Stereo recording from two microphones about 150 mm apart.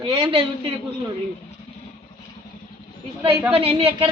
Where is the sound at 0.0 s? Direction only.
40° right (ahead or behind).